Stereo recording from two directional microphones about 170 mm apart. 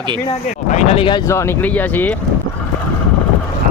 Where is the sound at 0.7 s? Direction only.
40° left (ahead or behind).